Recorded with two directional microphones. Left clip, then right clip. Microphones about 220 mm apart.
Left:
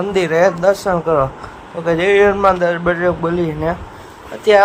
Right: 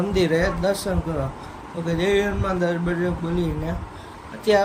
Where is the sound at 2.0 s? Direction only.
5° left (ahead or behind).